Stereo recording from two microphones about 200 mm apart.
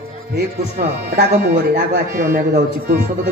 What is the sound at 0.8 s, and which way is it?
Speech, 45° right (ahead or behind).